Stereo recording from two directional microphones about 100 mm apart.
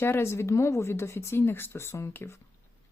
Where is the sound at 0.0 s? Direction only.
25° left (ahead or behind).